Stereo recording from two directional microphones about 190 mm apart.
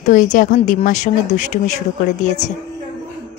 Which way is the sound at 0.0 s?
40° left (ahead or behind).